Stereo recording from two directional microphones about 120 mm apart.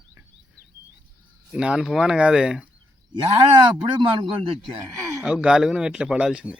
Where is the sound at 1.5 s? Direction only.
5° right (ahead or behind).